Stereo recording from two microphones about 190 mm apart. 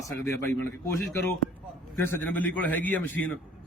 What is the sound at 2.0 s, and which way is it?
A man's voice, 10° left (ahead or behind).